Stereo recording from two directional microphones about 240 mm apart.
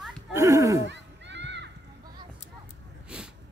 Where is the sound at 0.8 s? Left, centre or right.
Right.